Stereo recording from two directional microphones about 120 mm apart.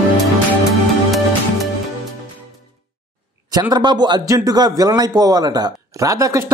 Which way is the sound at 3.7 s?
35° right (ahead or behind).